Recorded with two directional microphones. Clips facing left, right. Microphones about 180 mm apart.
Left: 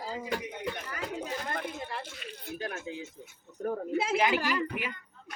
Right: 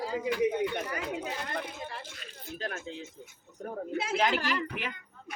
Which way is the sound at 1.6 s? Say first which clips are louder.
Left 3 dB; 60° left (ahead or behind).